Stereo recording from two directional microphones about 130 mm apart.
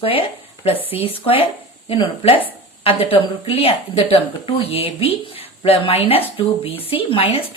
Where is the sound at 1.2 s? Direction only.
45° left (ahead or behind).